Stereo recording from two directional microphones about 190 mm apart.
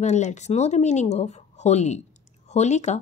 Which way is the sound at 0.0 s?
40° left (ahead or behind).